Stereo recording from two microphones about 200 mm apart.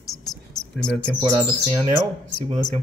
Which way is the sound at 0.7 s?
5° left (ahead or behind).